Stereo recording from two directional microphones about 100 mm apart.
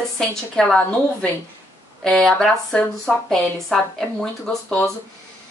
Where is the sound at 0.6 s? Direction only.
10° left (ahead or behind).